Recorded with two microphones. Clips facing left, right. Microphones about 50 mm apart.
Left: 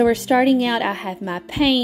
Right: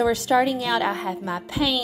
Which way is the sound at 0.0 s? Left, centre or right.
Left.